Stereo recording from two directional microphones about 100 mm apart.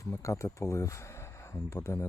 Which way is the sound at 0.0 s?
30° left (ahead or behind).